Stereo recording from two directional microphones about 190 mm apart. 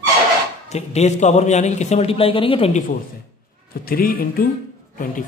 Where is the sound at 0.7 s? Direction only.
35° left (ahead or behind).